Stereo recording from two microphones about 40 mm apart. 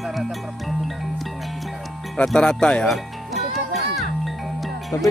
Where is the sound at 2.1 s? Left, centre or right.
Centre.